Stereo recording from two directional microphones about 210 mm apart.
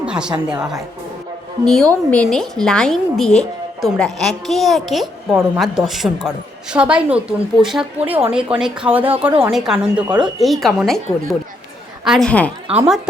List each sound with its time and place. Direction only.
0.0 s a woman's voice: 5° right (ahead or behind)